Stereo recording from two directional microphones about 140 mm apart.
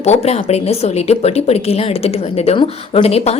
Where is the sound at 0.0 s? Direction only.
50° left (ahead or behind).